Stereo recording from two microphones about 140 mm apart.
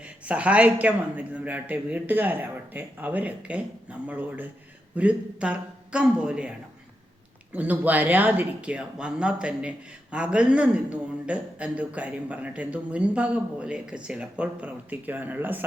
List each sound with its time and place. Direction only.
0.3 s speech: 10° right (ahead or behind)
7.5 s speech: 10° right (ahead or behind)